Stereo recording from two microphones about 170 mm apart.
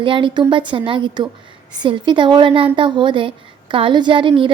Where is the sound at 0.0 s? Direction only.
30° right (ahead or behind).